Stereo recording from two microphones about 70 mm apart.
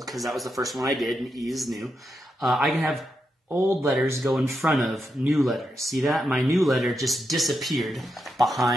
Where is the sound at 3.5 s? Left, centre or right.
Right.